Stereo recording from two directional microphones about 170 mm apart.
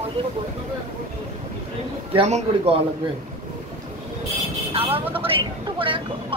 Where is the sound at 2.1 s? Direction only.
40° right (ahead or behind).